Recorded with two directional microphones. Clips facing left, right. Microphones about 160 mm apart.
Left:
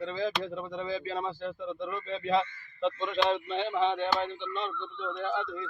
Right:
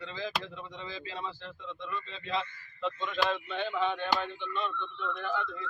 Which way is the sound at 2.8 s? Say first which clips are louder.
Left 4 dB; 25° left (ahead or behind).